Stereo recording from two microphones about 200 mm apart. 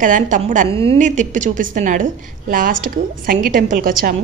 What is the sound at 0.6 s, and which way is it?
A woman's voice, 25° right (ahead or behind).